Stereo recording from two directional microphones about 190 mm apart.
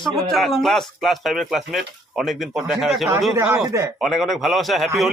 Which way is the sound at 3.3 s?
15° right (ahead or behind).